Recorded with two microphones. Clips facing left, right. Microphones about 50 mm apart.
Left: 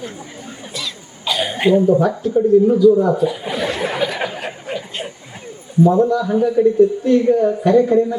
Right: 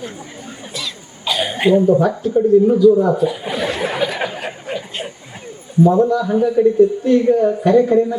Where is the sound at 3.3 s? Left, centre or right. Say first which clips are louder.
Even; centre.